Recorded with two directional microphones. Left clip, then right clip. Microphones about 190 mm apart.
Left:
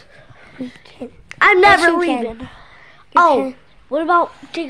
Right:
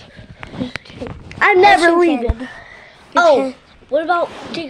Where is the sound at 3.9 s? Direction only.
50° left (ahead or behind).